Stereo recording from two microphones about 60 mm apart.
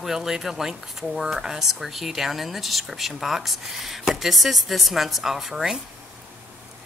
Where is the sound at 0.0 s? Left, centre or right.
Centre.